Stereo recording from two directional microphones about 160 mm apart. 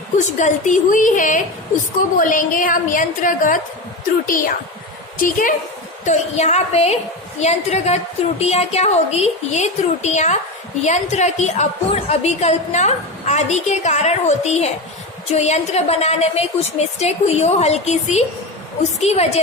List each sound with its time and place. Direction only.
0.2 s a woman's voice: 50° left (ahead or behind)
6.1 s a woman's voice: 45° left (ahead or behind)